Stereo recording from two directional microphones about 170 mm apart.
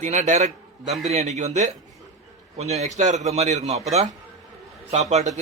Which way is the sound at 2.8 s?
45° right (ahead or behind).